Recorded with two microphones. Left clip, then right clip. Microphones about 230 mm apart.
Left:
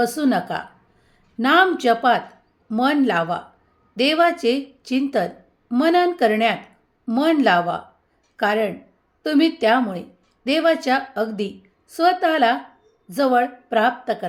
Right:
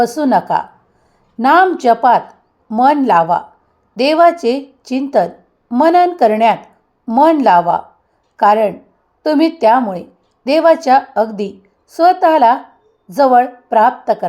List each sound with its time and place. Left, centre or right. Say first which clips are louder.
0.0 s a woman's voice: right 8 dB; centre